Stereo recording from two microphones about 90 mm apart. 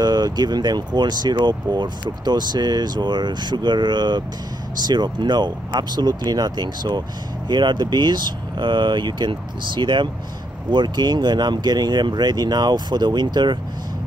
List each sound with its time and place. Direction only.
0.0 s speech: 50° right (ahead or behind)